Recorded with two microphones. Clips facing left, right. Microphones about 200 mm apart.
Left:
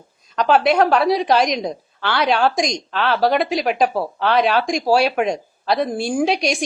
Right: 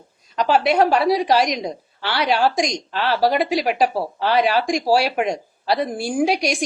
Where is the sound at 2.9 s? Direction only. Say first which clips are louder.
Left 2 dB; 55° left (ahead or behind).